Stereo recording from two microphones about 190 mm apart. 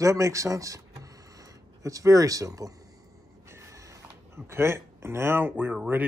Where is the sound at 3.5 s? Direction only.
15° right (ahead or behind).